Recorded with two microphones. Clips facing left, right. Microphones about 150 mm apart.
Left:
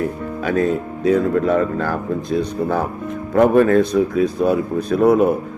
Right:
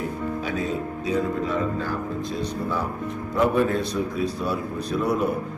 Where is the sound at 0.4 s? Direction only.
55° left (ahead or behind).